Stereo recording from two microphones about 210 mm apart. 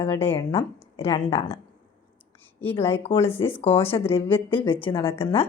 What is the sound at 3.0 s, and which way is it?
Speech, 25° left (ahead or behind).